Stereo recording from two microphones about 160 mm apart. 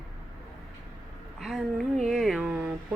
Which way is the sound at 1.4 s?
Centre (ahead or behind).